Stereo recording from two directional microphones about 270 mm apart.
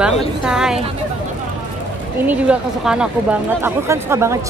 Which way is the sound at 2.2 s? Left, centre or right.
Centre.